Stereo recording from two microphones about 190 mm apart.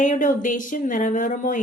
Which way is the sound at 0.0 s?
40° left (ahead or behind).